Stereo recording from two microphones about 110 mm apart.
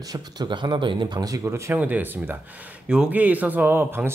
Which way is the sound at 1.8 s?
15° right (ahead or behind).